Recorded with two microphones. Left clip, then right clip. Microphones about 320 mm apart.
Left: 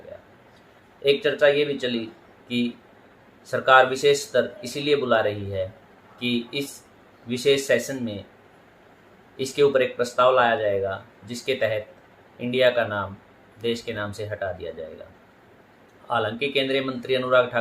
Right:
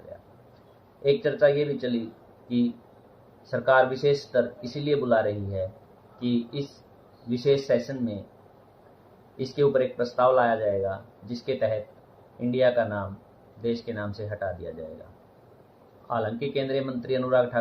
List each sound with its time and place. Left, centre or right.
1.0 s speech: left
3.5 s speech: left
9.4 s speech: left
16.0 s speech: left